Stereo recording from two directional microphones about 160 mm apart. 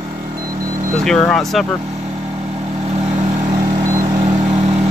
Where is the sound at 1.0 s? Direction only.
5° left (ahead or behind).